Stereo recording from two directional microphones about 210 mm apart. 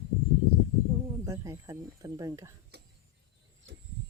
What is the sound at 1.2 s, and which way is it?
Speech, 15° right (ahead or behind).